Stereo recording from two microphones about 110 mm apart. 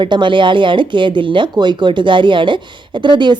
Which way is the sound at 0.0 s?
45° right (ahead or behind).